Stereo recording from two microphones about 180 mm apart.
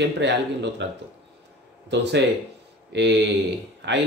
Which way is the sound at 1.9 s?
70° right (ahead or behind).